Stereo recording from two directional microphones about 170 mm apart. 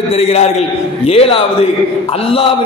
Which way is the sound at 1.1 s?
35° left (ahead or behind).